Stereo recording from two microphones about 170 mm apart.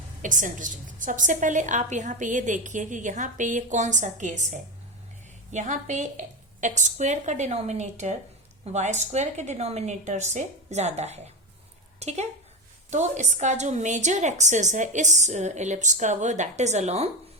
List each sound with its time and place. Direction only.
0.2 s a woman's voice: 50° right (ahead or behind)